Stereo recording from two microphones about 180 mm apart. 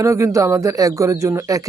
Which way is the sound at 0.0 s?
15° right (ahead or behind).